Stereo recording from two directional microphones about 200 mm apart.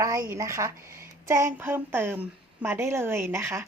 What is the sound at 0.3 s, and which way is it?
Speech, 15° right (ahead or behind).